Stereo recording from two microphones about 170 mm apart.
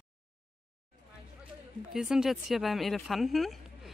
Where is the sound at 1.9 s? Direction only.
5° right (ahead or behind).